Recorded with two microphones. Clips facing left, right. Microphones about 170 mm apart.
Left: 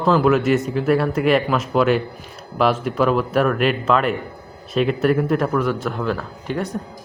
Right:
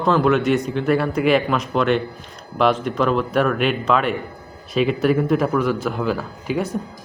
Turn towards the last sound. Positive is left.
turn(degrees=-5)  # may be behind; listen again after turning